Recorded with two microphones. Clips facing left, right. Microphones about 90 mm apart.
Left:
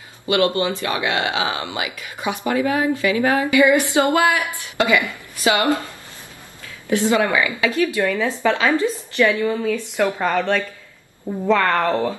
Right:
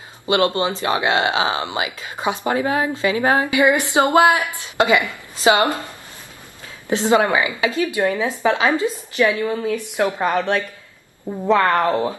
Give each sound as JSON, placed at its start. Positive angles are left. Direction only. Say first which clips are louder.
{"t": 0.3, "sound": "speech", "louder": "even", "side_deg": -25}
{"t": 6.9, "sound": "speech", "louder": "right 1 dB", "side_deg": -25}